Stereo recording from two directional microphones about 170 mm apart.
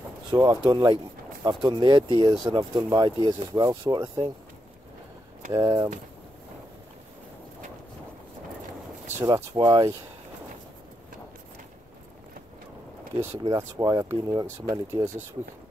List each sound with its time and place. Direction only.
0.3 s speech: 25° right (ahead or behind)
5.5 s speech: 20° right (ahead or behind)
9.2 s speech: 20° right (ahead or behind)
13.1 s speech: 15° right (ahead or behind)